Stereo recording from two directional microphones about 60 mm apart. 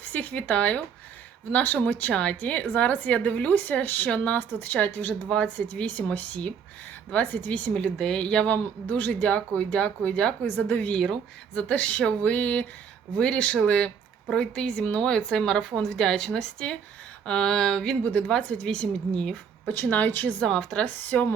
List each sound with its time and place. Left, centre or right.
0.0 s speech: left
4.1 s speech: centre
4.4 s speech: left
7.7 s speech: centre
10.4 s speech: left
10.9 s speech: centre
19.7 s speech: left
20.4 s speech: centre
21.0 s speech: left